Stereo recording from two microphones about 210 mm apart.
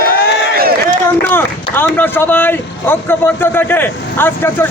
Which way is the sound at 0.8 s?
10° left (ahead or behind).